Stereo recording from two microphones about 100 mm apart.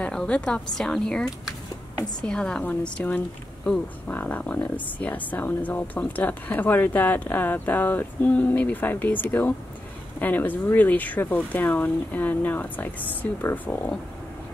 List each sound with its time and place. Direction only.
0.0 s speech: 10° left (ahead or behind)